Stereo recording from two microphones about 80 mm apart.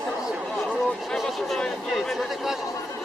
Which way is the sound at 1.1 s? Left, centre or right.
Centre.